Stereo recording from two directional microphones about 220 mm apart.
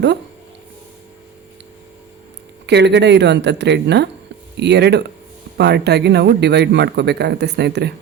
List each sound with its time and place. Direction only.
2.6 s speech: 50° right (ahead or behind)